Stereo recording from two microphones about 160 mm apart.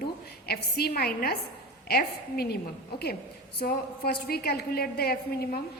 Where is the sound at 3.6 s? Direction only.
75° left (ahead or behind).